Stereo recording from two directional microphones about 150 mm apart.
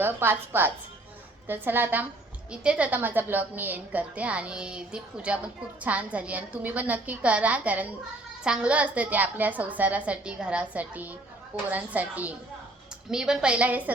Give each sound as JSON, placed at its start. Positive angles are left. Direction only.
{"t": 0.0, "sound": "a woman's voice", "side_deg": -15}